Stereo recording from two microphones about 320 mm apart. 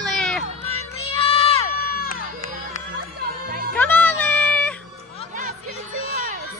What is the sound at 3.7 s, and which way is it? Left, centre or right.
Music, centre.